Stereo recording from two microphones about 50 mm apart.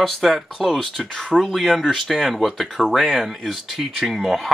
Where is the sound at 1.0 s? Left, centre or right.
Centre.